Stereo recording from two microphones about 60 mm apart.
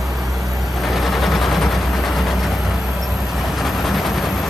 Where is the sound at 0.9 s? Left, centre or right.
Centre.